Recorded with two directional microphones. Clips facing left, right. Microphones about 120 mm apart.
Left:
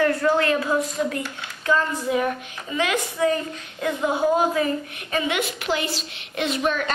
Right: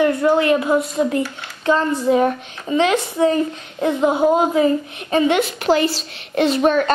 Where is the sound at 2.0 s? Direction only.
35° right (ahead or behind).